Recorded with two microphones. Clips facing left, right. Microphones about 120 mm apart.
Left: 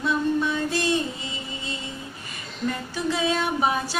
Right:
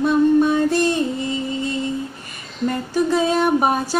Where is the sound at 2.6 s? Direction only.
45° right (ahead or behind).